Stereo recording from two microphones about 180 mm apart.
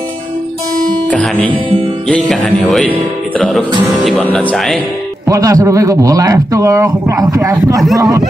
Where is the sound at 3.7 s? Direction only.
25° right (ahead or behind).